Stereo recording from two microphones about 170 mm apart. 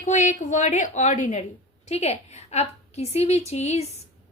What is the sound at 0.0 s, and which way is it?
A woman's voice, 45° left (ahead or behind).